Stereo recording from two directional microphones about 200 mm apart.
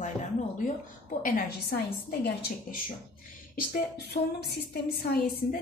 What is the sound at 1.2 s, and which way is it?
Speech, 45° left (ahead or behind).